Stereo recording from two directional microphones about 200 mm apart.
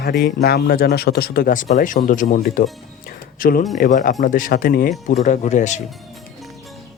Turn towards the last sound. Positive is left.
turn(degrees=35)  # may be behind; listen again after turning